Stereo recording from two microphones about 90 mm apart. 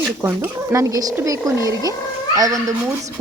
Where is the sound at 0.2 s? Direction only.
30° right (ahead or behind).